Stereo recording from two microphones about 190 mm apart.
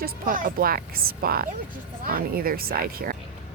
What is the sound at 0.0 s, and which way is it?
A child's voice, 45° right (ahead or behind).